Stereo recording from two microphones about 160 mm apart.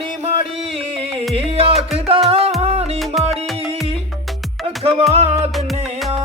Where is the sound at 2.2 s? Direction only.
40° right (ahead or behind).